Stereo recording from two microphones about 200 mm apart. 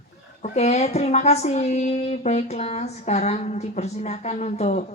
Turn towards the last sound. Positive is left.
turn(degrees=35)  # may be behind; listen again after turning